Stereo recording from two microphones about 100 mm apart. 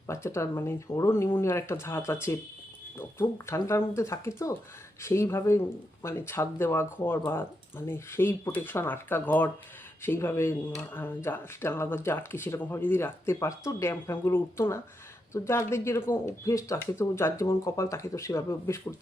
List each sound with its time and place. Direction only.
0.1 s speech: 30° left (ahead or behind)